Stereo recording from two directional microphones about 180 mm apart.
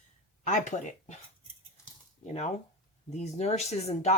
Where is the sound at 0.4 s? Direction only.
45° left (ahead or behind).